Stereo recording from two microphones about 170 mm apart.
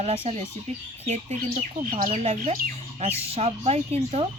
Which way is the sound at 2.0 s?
40° right (ahead or behind).